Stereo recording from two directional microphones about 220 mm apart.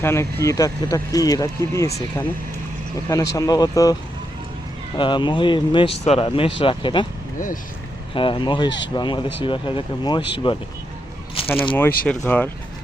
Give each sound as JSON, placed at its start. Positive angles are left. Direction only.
{"t": 0.0, "sound": "speech", "side_deg": 10}
{"t": 3.3, "sound": "speech", "side_deg": 15}
{"t": 4.9, "sound": "speech", "side_deg": 20}
{"t": 7.3, "sound": "speech", "side_deg": 35}
{"t": 8.1, "sound": "speech", "side_deg": 25}
{"t": 11.4, "sound": "speech", "side_deg": 5}